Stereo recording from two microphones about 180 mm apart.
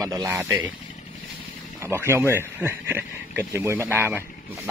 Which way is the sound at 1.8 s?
15° right (ahead or behind).